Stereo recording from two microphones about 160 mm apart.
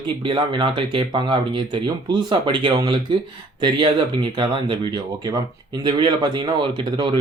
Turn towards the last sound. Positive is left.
turn(degrees=-30)  # may be behind; listen again after turning